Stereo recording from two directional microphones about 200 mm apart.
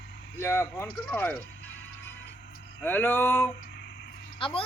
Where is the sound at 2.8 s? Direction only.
10° left (ahead or behind).